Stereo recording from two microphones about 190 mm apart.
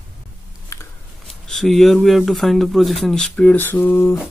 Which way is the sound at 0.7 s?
15° left (ahead or behind).